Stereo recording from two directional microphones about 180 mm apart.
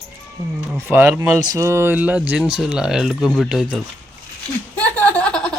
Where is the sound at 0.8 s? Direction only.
15° right (ahead or behind).